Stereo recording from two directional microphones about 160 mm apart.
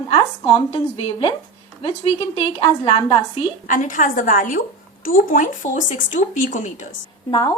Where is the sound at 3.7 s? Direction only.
55° left (ahead or behind).